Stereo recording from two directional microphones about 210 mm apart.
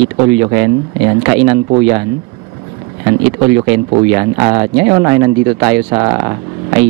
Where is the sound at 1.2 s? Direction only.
15° right (ahead or behind).